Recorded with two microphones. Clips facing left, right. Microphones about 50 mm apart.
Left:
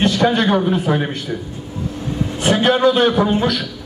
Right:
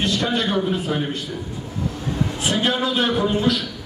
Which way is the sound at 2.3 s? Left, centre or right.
Left.